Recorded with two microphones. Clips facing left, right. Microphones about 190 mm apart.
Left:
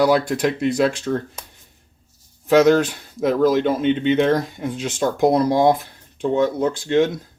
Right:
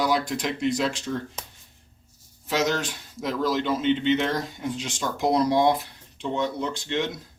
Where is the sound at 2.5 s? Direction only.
55° left (ahead or behind).